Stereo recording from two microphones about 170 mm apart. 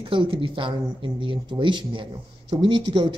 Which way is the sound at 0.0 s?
30° right (ahead or behind).